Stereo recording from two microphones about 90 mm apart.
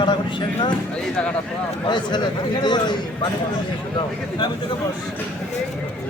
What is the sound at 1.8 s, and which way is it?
A man's voice, 55° left (ahead or behind).